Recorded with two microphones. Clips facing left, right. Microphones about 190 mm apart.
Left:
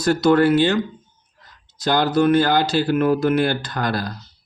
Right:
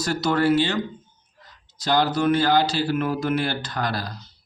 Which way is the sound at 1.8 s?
55° left (ahead or behind).